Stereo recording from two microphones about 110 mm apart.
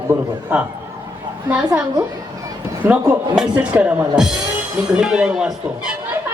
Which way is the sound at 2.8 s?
15° right (ahead or behind).